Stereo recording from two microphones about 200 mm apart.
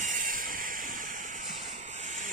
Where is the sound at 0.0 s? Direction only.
40° right (ahead or behind).